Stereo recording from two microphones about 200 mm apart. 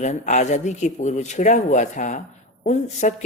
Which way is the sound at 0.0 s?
35° left (ahead or behind).